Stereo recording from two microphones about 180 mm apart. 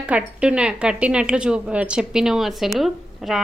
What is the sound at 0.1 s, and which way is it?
A woman's voice, 5° right (ahead or behind).